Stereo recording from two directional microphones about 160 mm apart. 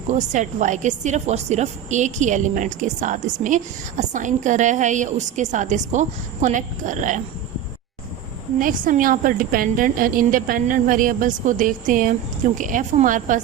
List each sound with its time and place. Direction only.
0.1 s a woman's voice: 50° right (ahead or behind)
8.5 s a woman's voice: 55° right (ahead or behind)